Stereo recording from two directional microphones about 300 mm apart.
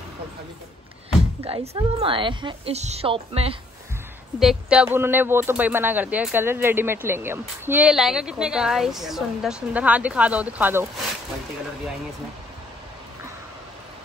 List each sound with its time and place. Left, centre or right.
1.4 s a woman's voice: centre
4.4 s a man's voice: centre